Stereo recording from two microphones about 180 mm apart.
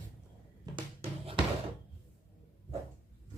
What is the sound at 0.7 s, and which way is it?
Music, 30° right (ahead or behind).